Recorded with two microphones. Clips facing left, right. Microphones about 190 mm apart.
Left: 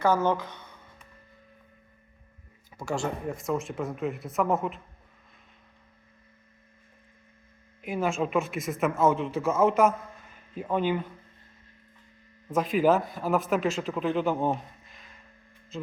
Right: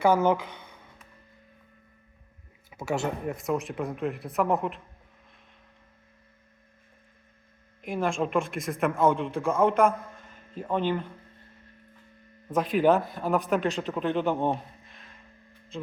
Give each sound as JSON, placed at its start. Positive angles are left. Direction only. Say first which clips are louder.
{"t": 0.0, "sound": "a sound", "louder": "right 2 dB", "side_deg": -10}
{"t": 2.6, "sound": "a man's voice", "louder": "right 1 dB", "side_deg": -5}
{"t": 7.8, "sound": "a man's voice", "louder": "even", "side_deg": 5}
{"t": 12.5, "sound": "a man's voice", "louder": "right 1 dB", "side_deg": 0}